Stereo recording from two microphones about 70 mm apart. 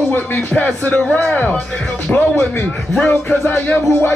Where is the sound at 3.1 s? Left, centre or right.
Left.